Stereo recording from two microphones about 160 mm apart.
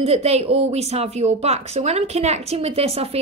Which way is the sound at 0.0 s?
40° right (ahead or behind).